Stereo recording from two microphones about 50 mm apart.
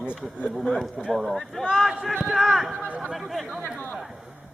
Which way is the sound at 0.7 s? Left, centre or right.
Centre.